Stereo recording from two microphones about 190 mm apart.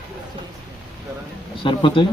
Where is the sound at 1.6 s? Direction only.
25° left (ahead or behind).